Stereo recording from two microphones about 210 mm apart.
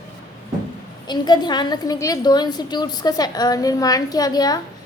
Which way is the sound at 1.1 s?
20° left (ahead or behind).